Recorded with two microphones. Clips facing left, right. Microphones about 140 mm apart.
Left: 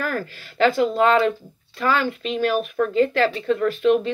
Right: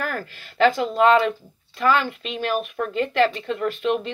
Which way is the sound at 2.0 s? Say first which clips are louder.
Left 4 dB; 40° left (ahead or behind).